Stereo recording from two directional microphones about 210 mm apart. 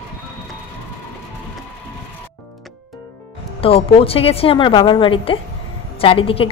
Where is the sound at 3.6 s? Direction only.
30° left (ahead or behind).